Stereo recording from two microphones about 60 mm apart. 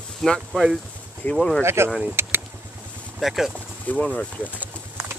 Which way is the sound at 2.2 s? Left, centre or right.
Right.